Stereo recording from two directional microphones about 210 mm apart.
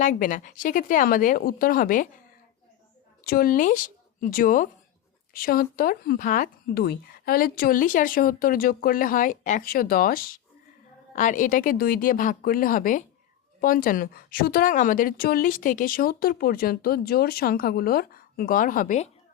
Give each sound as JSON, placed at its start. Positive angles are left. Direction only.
{"t": 0.0, "sound": "speech", "side_deg": 40}
{"t": 3.2, "sound": "speech", "side_deg": 45}